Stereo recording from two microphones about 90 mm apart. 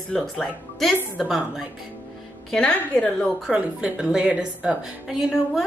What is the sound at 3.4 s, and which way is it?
Speech, 10° right (ahead or behind).